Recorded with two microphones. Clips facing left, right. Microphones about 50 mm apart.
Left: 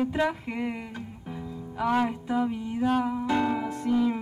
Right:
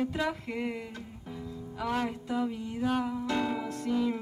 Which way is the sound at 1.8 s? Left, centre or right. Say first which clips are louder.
Left 6 dB; centre.